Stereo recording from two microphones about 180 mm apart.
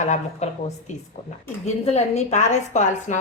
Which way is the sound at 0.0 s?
40° left (ahead or behind).